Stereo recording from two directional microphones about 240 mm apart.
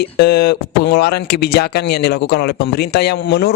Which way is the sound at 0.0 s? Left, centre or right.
Left.